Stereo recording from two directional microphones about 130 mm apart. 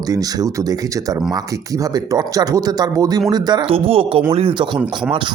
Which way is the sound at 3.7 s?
45° right (ahead or behind).